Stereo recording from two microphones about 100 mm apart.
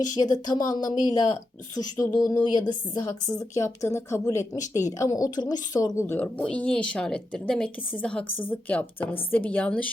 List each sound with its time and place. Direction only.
0.2 s speech: 40° left (ahead or behind)
2.4 s speech: 50° left (ahead or behind)
3.1 s speech: 35° left (ahead or behind)
6.0 s speech: 25° left (ahead or behind)